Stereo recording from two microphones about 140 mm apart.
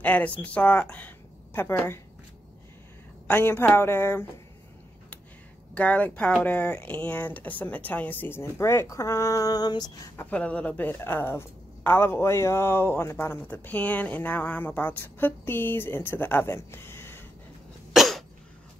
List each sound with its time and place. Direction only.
0.0 s speech: 10° left (ahead or behind)
3.3 s a woman's voice: 15° left (ahead or behind)
5.8 s a woman's voice: 10° left (ahead or behind); by 9.9 s 30° left (ahead or behind)
10.3 s a woman's voice: 10° left (ahead or behind)
17.9 s cough: centre (ahead or behind)